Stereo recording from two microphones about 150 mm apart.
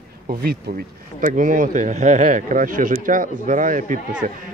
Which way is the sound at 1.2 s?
65° right (ahead or behind).